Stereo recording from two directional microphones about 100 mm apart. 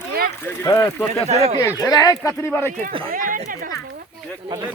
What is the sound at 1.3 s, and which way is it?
Speech, 90° right.